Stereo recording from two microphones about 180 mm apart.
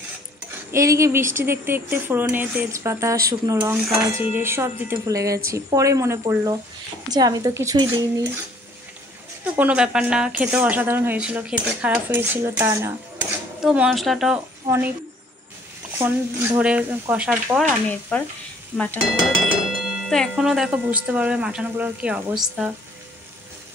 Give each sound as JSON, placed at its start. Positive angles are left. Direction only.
{"t": 0.7, "sound": "speech", "side_deg": -15}
{"t": 9.4, "sound": "speech", "side_deg": -5}
{"t": 13.6, "sound": "speech", "side_deg": -5}
{"t": 14.7, "sound": "speech", "side_deg": -15}
{"t": 16.0, "sound": "speech", "side_deg": -10}
{"t": 18.1, "sound": "speech", "side_deg": 10}
{"t": 19.4, "sound": "speech", "side_deg": 0}